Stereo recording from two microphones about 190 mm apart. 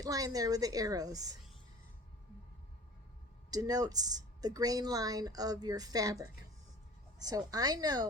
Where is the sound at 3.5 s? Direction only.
20° right (ahead or behind).